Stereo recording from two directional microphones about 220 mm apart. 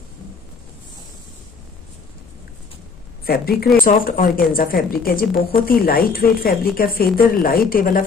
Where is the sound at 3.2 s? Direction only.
45° left (ahead or behind).